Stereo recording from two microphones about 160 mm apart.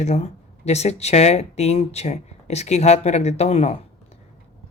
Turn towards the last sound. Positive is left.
turn(degrees=45)  # may be behind; listen again after turning